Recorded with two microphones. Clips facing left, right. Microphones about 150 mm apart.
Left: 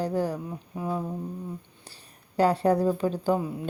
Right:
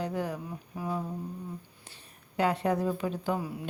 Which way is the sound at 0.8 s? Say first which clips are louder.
Left 3 dB; 20° left (ahead or behind).